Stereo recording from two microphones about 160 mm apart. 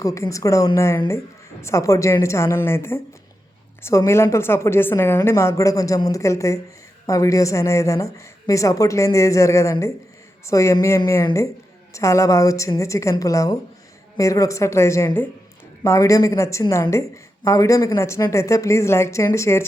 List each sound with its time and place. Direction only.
0.0 s a woman's voice: 20° left (ahead or behind)